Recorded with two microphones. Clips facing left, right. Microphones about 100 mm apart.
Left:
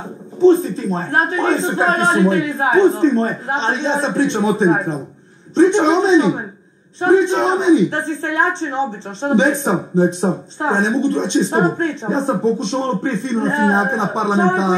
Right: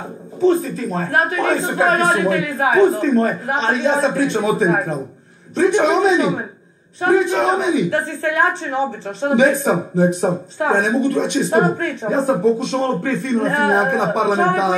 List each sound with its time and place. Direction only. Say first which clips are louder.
0.4 s a man's voice: left 4 dB; 25° left (ahead or behind)